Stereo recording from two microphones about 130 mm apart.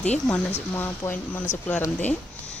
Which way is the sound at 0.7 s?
15° left (ahead or behind).